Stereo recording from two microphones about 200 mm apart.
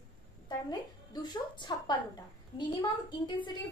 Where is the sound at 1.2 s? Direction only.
20° left (ahead or behind).